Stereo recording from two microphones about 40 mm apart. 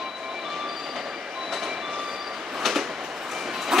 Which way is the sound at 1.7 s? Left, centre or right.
Centre.